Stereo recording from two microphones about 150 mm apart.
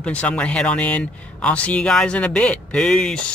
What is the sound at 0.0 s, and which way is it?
Speech, 10° left (ahead or behind).